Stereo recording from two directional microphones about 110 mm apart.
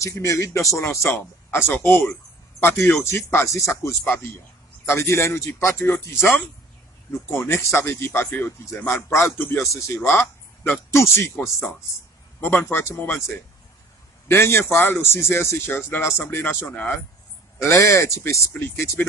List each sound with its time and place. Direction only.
0.0 s speech: 30° left (ahead or behind)
7.1 s speech: 20° left (ahead or behind)